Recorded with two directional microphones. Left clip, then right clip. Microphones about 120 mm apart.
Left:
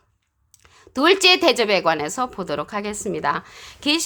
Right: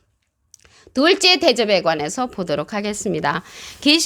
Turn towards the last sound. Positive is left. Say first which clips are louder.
# right 5 dB
turn(degrees=-55)  # may be behind; listen again after turning